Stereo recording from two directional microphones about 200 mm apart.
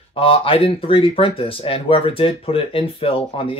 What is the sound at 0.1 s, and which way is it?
Speech, 25° left (ahead or behind).